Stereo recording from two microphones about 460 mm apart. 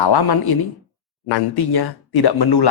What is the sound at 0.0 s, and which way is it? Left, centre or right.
A man's voice, left.